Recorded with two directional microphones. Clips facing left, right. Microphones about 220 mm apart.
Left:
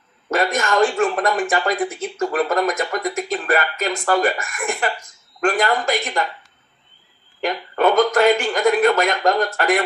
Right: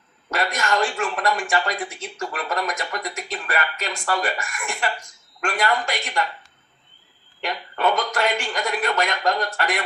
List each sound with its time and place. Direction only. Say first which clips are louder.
0.3 s speech: left 4 dB; 45° left (ahead or behind)
7.4 s speech: left 5 dB; 50° left (ahead or behind)